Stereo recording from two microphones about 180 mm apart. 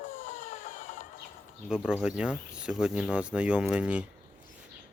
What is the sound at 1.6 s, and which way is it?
Speech, 5° right (ahead or behind).